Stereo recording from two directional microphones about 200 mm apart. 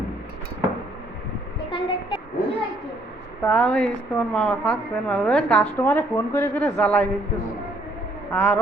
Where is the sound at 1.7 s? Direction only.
25° left (ahead or behind).